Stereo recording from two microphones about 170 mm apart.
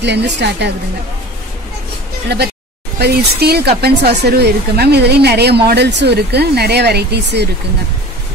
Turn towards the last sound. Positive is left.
turn(degrees=-80)